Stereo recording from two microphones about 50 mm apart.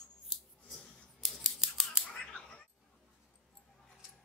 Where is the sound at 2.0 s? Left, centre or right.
Left.